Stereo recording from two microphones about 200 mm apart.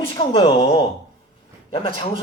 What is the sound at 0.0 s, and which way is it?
Speech, 30° left (ahead or behind).